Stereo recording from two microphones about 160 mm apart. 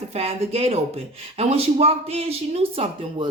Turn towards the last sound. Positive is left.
turn(degrees=-35)  # may be behind; listen again after turning